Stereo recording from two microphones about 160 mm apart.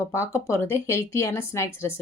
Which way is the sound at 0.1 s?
20° left (ahead or behind).